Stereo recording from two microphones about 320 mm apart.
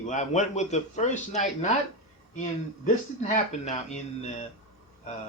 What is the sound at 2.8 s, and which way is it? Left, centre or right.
A man's voice, left.